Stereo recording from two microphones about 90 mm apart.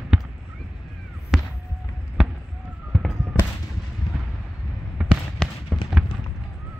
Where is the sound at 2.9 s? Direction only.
5° right (ahead or behind).